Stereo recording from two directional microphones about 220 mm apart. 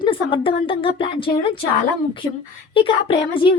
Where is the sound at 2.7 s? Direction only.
25° left (ahead or behind).